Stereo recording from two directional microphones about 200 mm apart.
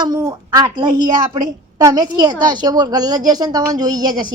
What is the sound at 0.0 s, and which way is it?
A woman's voice, 15° right (ahead or behind).